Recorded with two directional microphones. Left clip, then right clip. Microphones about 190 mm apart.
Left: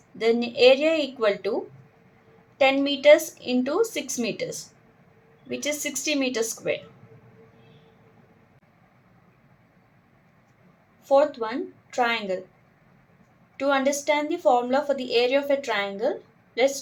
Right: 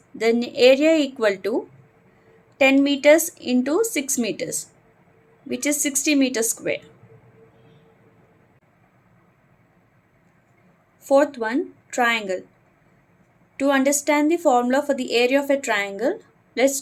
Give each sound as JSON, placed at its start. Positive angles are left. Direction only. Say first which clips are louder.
{"t": 0.2, "sound": "a woman's voice", "louder": "right 2 dB", "side_deg": -35}
{"t": 2.6, "sound": "a woman's voice", "louder": "right 4 dB", "side_deg": -35}
{"t": 11.1, "sound": "a woman's voice", "louder": "right 2 dB", "side_deg": -45}
{"t": 13.6, "sound": "a woman's voice", "louder": "right 3 dB", "side_deg": -45}